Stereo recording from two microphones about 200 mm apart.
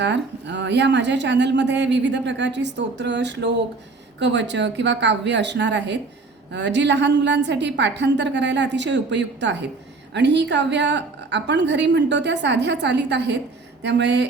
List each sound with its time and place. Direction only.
0.0 s a woman's voice: 60° right (ahead or behind)